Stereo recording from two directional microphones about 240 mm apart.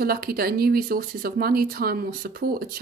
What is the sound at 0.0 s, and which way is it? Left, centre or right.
Speech, right.